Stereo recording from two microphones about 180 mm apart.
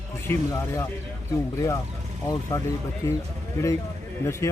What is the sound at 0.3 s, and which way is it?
A man's voice, 15° left (ahead or behind).